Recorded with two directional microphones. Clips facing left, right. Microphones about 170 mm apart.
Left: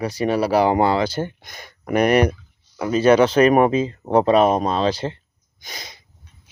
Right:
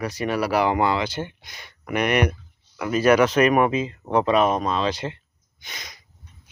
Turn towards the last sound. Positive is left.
turn(degrees=30)  # may be behind; listen again after turning